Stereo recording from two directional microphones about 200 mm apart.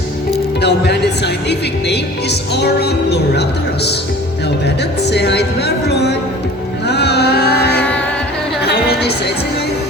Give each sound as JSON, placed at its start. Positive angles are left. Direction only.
{"t": 0.6, "sound": "speech", "side_deg": 55}
{"t": 4.8, "sound": "speech", "side_deg": 55}
{"t": 6.8, "sound": "a sound", "side_deg": 55}